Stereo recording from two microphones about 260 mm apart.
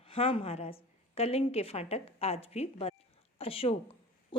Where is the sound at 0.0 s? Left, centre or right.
Left.